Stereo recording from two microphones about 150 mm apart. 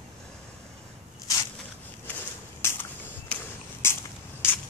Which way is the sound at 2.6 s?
15° left (ahead or behind).